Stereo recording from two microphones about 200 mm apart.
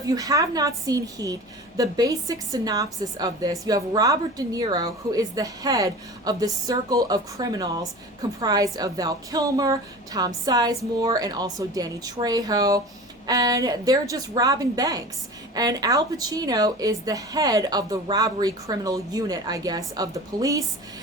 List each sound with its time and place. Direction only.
0.1 s a woman's voice: 20° right (ahead or behind)